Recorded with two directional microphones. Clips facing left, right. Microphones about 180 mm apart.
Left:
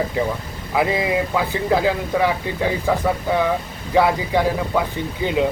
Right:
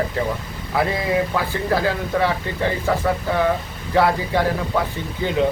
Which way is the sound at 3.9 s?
15° left (ahead or behind).